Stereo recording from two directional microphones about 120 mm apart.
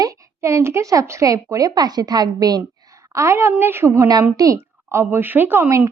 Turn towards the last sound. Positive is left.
turn(degrees=-15)  # may be behind; listen again after turning